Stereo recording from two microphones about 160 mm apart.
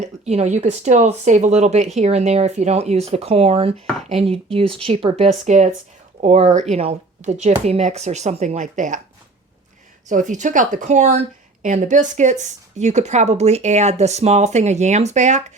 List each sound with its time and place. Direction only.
0.0 s speech: 45° right (ahead or behind)
10.1 s speech: 50° right (ahead or behind)